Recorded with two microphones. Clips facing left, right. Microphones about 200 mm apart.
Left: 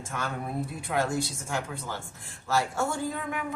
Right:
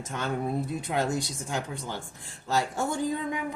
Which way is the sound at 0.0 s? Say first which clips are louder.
Right 4 dB; 20° right (ahead or behind).